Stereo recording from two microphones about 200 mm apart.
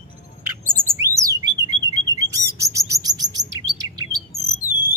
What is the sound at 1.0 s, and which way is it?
Bird, 15° right (ahead or behind).